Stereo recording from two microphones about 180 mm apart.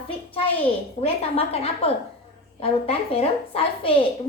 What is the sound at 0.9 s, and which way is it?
A woman's voice, 35° left (ahead or behind).